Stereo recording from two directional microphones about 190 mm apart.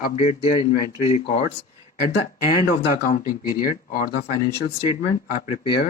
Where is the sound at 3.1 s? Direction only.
45° left (ahead or behind).